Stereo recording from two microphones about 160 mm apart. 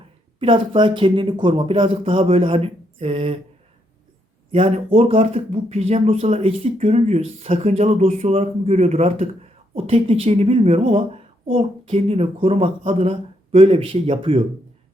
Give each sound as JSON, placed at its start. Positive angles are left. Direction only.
{"t": 0.3, "sound": "speech", "side_deg": -30}
{"t": 4.5, "sound": "speech", "side_deg": -35}